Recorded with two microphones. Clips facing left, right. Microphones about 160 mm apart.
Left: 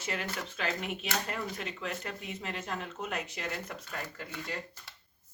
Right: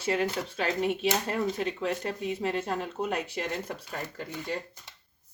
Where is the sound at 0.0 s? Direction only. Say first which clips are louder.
Right 8 dB; 30° right (ahead or behind).